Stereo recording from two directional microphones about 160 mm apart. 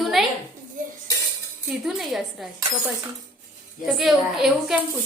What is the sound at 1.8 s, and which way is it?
Speech, centre (ahead or behind).